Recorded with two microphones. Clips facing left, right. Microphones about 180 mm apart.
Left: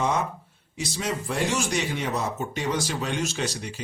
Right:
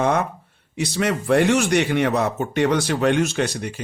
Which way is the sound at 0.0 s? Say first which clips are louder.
Right 5 dB; 60° right (ahead or behind).